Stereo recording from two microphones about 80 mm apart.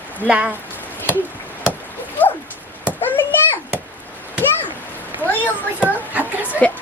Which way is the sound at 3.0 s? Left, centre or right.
Left.